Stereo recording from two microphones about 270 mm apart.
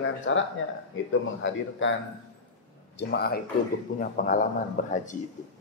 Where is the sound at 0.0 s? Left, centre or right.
Left.